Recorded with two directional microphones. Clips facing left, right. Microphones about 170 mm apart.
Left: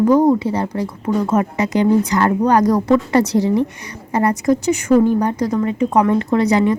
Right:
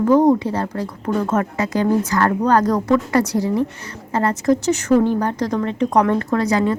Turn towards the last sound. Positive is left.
turn(degrees=20)  # may be behind; listen again after turning